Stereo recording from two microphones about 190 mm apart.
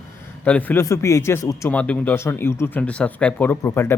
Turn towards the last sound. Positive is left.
turn(degrees=15)  # may be behind; listen again after turning